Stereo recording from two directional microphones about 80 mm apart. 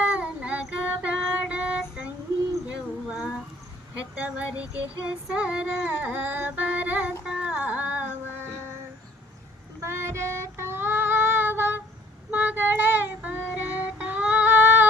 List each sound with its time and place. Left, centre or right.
0.1 s child singing: centre
2.6 s a sound: centre
4.2 s female singing: centre
7.3 s music: centre
9.8 s female singing: right
12.3 s child singing: right
14.0 s humming: centre